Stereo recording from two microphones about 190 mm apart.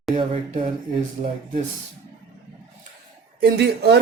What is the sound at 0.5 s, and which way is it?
Speech, 30° right (ahead or behind).